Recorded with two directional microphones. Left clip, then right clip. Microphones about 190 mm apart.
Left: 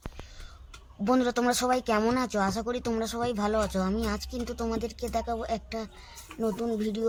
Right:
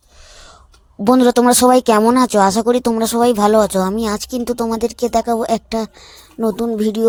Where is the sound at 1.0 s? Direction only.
45° right (ahead or behind).